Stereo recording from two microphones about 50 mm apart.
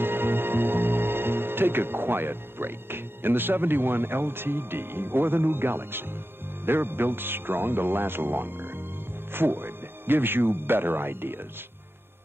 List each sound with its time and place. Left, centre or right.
0.0 s speech: right